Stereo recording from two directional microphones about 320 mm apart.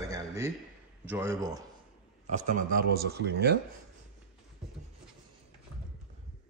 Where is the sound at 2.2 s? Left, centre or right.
Right.